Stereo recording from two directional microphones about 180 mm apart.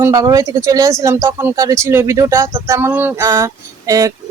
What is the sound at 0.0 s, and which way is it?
Speech, 20° right (ahead or behind).